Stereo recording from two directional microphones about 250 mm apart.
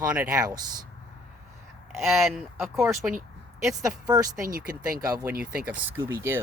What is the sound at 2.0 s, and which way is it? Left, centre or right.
Speech, centre.